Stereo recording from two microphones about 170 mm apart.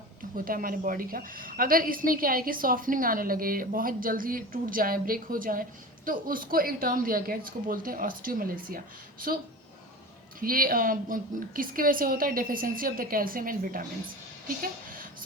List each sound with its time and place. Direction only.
0.3 s a woman's voice: 55° right (ahead or behind)
10.4 s a woman's voice: 55° right (ahead or behind)
14.4 s a sound: 55° right (ahead or behind)